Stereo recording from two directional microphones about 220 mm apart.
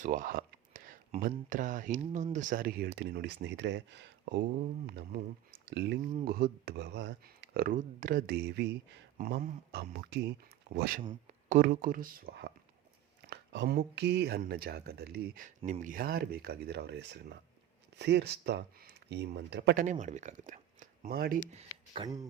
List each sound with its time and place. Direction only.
0.0 s speech: 35° right (ahead or behind)
9.1 s speech: 40° right (ahead or behind)
11.0 s speech: 20° right (ahead or behind)
11.4 s speech: 40° right (ahead or behind)
19.8 s speech: 35° right (ahead or behind)
21.9 s speech: 20° right (ahead or behind)